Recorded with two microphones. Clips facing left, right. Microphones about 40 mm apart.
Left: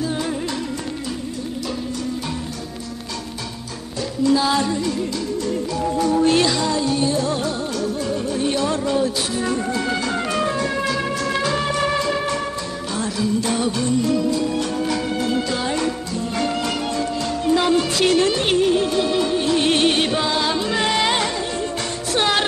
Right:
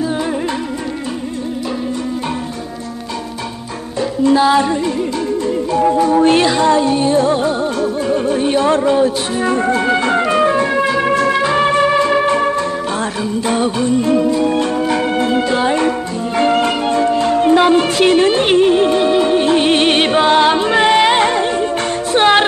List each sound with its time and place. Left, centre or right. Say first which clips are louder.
4.2 s music: right 6 dB; right